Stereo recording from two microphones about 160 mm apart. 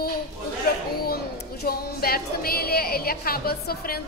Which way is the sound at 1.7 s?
70° left (ahead or behind).